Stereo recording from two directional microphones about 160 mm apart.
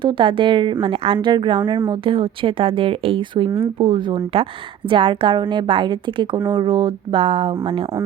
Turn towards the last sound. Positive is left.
turn(degrees=-35)  # may be behind; listen again after turning